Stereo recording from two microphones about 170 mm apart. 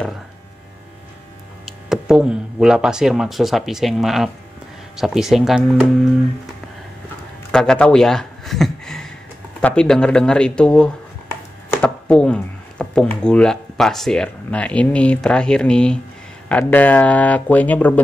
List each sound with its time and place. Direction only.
1.7 s speech: 5° right (ahead or behind)
7.5 s a sound: 5° left (ahead or behind)
9.6 s speech: 5° left (ahead or behind)